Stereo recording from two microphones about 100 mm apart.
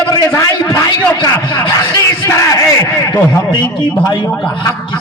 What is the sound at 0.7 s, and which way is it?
Speech, 40° left (ahead or behind).